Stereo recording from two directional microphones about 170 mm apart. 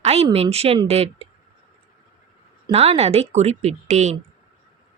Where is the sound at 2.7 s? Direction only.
40° right (ahead or behind).